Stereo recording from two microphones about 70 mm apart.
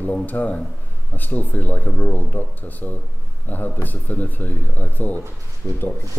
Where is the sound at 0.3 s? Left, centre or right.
Left.